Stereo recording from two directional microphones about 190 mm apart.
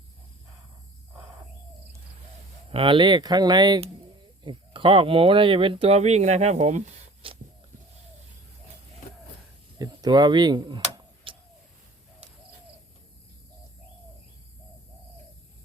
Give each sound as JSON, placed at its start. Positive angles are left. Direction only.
{"t": 2.6, "sound": "speech", "side_deg": -30}
{"t": 9.7, "sound": "tick-tock", "side_deg": -20}